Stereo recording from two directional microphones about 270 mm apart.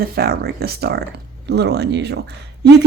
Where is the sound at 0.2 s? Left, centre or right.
Right.